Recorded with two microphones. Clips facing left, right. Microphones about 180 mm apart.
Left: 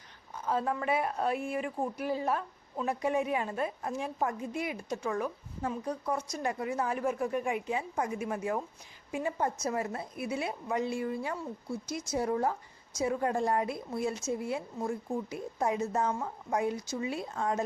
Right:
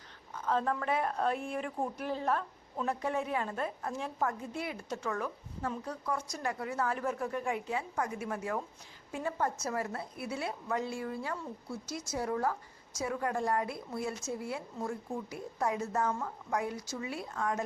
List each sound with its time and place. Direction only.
0.4 s a woman's voice: 10° left (ahead or behind); by 17.6 s 25° left (ahead or behind)